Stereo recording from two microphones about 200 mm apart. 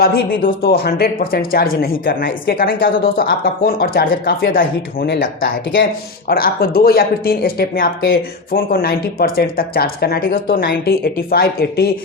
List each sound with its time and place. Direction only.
0.0 s speech: 50° left (ahead or behind)
6.2 s speech: 50° left (ahead or behind)